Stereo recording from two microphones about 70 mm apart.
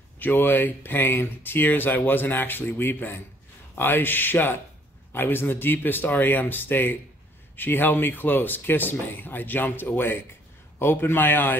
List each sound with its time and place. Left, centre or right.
0.2 s a man's voice: left